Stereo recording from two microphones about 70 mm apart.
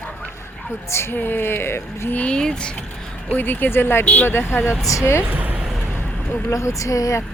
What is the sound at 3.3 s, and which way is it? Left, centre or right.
Speech, left.